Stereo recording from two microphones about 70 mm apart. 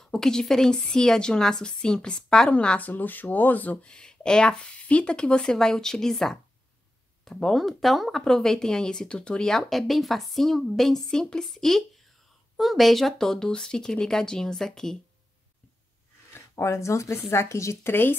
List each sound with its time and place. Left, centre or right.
0.0 s speech: centre
16.3 s speech: left